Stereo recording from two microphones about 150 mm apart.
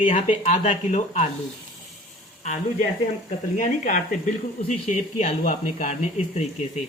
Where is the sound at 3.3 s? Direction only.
55° left (ahead or behind).